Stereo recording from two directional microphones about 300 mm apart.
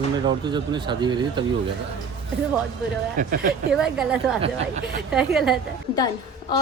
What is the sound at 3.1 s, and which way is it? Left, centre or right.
Speech, right.